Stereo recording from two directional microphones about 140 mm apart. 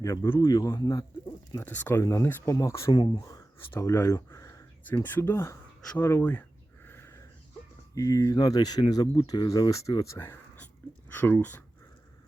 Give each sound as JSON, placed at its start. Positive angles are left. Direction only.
{"t": 0.0, "sound": "speech", "side_deg": 20}
{"t": 1.5, "sound": "speech", "side_deg": 15}
{"t": 2.9, "sound": "speech", "side_deg": 35}
{"t": 3.7, "sound": "speech", "side_deg": 15}
{"t": 6.8, "sound": "a sound", "side_deg": 15}
{"t": 7.9, "sound": "speech", "side_deg": 25}